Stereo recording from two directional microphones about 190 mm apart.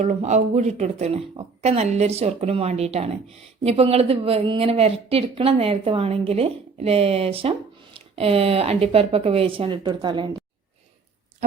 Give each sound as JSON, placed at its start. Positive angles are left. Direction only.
{"t": 0.0, "sound": "a woman's voice", "side_deg": -40}